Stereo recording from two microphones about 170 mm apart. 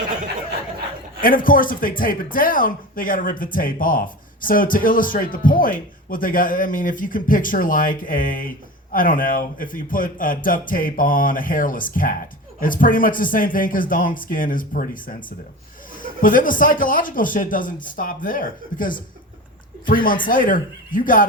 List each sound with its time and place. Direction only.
1.2 s speech: 55° left (ahead or behind)